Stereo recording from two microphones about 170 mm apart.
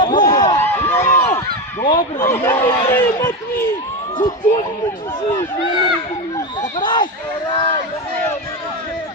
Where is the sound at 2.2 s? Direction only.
15° left (ahead or behind).